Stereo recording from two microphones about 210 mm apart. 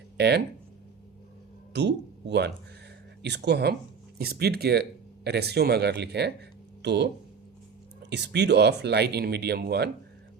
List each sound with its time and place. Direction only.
0.2 s speech: 55° right (ahead or behind)
1.7 s speech: 55° right (ahead or behind)
3.2 s speech: 55° right (ahead or behind)
8.1 s speech: 55° right (ahead or behind)